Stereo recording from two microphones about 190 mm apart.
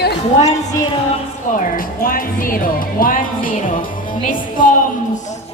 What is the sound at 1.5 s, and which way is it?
Speech, 50° left (ahead or behind).